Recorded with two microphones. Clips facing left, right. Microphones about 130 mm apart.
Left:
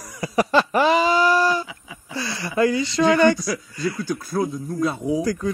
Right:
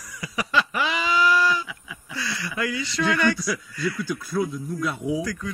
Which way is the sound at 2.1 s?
30° left (ahead or behind).